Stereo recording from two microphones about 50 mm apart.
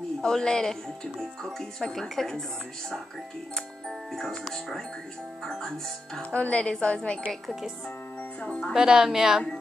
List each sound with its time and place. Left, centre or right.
0.2 s speech: centre
4.1 s speech: centre
6.3 s a woman's voice: left
8.4 s a woman's voice: left
8.7 s speech: centre